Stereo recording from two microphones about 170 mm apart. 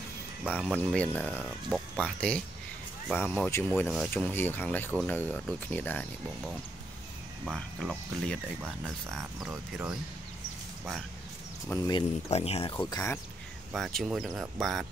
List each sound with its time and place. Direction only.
0.5 s speech: 5° left (ahead or behind)
1.2 s speech: 5° right (ahead or behind); by 6.0 s 10° left (ahead or behind)
7.4 s speech: centre (ahead or behind)
9.4 s speech: 10° right (ahead or behind)
11.7 s speech: 20° left (ahead or behind)
12.3 s speech: 35° left (ahead or behind)
12.7 s speech: 15° left (ahead or behind)
13.7 s speech: centre (ahead or behind)